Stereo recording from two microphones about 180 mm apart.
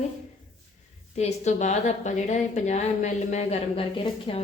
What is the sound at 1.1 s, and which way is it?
A woman's voice, 40° left (ahead or behind).